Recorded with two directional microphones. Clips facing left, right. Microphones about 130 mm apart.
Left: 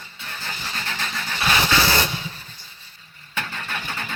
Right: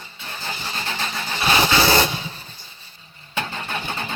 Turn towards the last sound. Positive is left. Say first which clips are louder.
# right 3 dB
turn(degrees=-25)  # may be behind; listen again after turning